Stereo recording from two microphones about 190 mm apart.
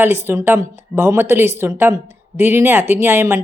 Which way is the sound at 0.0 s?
10° right (ahead or behind).